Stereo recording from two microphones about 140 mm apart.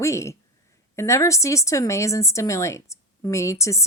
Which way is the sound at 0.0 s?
20° left (ahead or behind).